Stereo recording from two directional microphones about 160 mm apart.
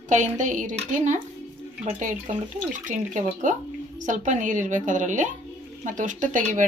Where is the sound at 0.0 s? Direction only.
50° right (ahead or behind).